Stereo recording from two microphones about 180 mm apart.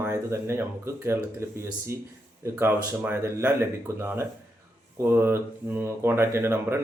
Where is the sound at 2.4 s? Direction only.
15° right (ahead or behind).